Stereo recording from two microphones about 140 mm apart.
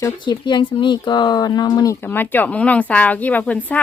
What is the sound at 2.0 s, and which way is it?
Speech, 15° left (ahead or behind).